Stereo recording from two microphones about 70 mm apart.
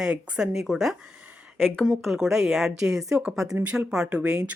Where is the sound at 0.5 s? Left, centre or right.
Centre.